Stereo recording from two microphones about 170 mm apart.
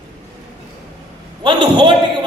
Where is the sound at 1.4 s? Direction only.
25° right (ahead or behind).